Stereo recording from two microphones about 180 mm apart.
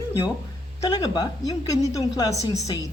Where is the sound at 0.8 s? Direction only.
20° left (ahead or behind).